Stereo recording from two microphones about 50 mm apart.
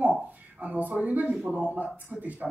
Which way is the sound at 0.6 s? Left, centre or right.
Right.